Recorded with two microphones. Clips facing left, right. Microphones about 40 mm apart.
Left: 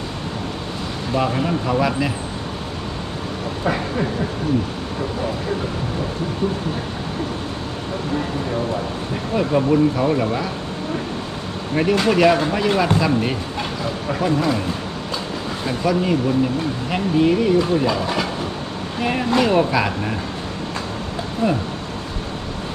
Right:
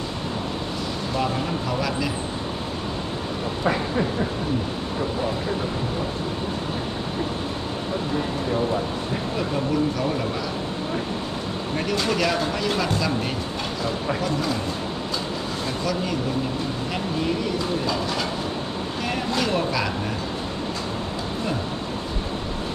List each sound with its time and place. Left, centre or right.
1.1 s speech: left
9.3 s speech: left
11.7 s speech: left
15.6 s speech: centre